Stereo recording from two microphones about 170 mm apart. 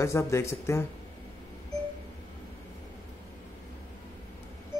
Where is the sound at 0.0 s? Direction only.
15° left (ahead or behind).